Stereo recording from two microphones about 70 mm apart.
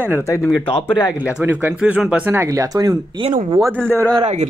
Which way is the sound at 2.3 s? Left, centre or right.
Right.